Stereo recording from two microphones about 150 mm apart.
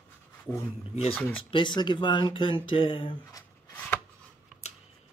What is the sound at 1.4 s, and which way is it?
Speech, 35° left (ahead or behind).